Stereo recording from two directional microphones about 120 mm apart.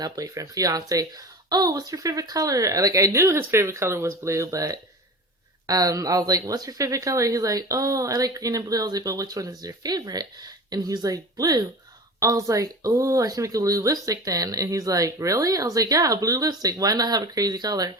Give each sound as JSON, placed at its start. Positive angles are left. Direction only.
{"t": 0.0, "sound": "speech", "side_deg": -30}